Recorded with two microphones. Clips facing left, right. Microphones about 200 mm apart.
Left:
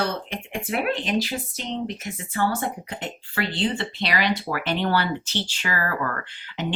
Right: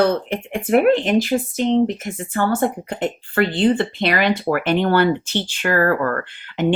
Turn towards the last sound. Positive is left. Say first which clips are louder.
# right 10 dB
turn(degrees=-55)  # may be behind; listen again after turning